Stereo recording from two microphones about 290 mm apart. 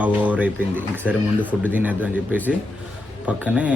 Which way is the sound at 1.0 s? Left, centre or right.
Centre.